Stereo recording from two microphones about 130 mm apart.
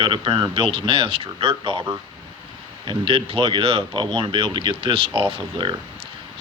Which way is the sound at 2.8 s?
45° right (ahead or behind).